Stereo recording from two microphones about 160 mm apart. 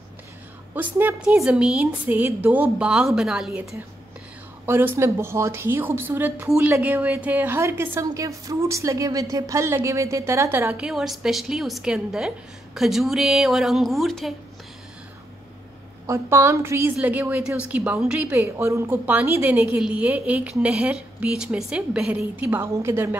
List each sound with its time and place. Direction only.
0.7 s a woman's voice: 10° right (ahead or behind)
4.6 s a woman's voice: 15° right (ahead or behind)
16.1 s a woman's voice: 15° right (ahead or behind)